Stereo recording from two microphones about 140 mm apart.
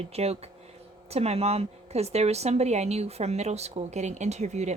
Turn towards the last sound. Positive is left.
turn(degrees=-55)  # may be behind; listen again after turning